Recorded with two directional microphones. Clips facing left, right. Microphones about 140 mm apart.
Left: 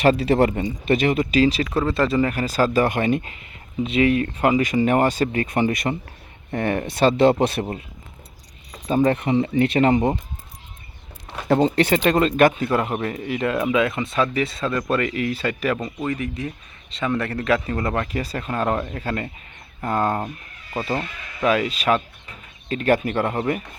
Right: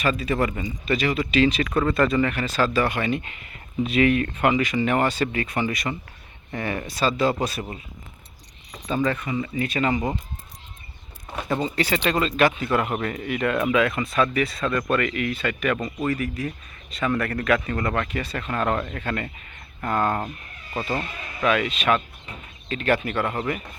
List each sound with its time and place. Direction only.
0.0 s speech: 70° left (ahead or behind)
0.5 s speech: 50° left (ahead or behind)
3.5 s speech: 25° left (ahead or behind); by 7.6 s 60° left (ahead or behind)
8.9 s speech: 45° left (ahead or behind)
9.1 s speech: 65° left (ahead or behind)
11.4 s speech: 65° left (ahead or behind); by 15.8 s 35° left (ahead or behind)
16.0 s speech: 20° left (ahead or behind)
21.0 s speech: 30° right (ahead or behind)
21.4 s speech: 35° left (ahead or behind)